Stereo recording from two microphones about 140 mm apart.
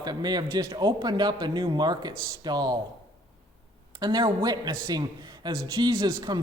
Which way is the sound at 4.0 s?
30° right (ahead or behind).